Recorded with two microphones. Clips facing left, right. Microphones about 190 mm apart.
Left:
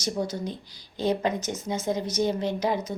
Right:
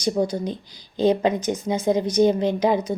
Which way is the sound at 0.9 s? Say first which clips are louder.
Right 6 dB; 20° right (ahead or behind).